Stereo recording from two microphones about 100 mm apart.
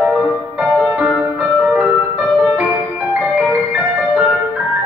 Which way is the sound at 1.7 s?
15° right (ahead or behind).